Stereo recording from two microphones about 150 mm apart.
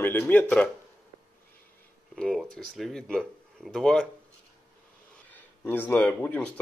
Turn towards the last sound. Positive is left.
turn(degrees=10)  # may be behind; listen again after turning